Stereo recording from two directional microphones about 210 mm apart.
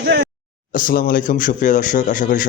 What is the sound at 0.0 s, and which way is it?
Speech, 50° right (ahead or behind).